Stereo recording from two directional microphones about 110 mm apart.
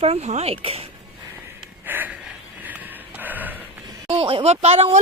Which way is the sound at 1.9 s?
15° right (ahead or behind).